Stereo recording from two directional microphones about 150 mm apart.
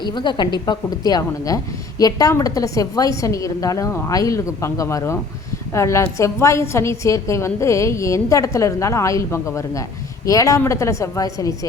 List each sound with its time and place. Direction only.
0.0 s a woman's voice: 30° left (ahead or behind)